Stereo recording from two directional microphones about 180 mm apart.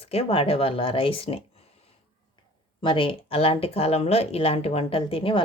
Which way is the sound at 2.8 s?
30° left (ahead or behind).